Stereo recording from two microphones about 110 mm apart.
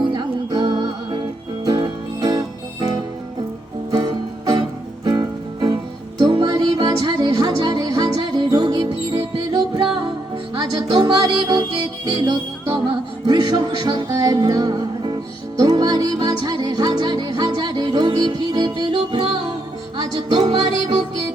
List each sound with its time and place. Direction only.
0.1 s music: 45° right (ahead or behind)
3.9 s music: 40° right (ahead or behind)
20.0 s music: 45° right (ahead or behind)